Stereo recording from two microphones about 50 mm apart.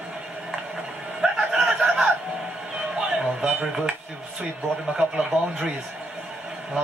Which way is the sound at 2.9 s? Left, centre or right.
Centre.